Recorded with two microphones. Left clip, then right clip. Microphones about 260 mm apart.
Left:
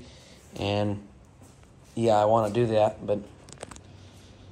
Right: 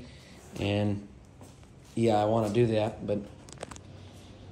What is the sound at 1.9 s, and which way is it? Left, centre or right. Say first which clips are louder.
Speech: left 4 dB; left.